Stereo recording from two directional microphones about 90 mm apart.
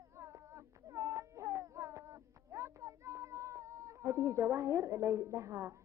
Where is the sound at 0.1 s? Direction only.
35° right (ahead or behind).